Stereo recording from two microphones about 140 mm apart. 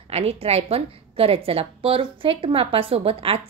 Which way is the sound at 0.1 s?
50° right (ahead or behind).